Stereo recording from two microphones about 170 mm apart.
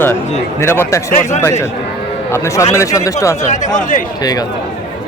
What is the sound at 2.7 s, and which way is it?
Speech, 20° left (ahead or behind).